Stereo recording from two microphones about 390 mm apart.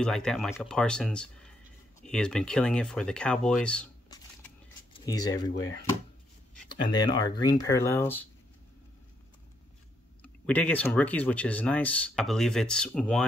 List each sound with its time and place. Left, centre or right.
0.0 s speech: centre
5.5 s speech: left
6.5 s speech: centre
10.2 s speech: centre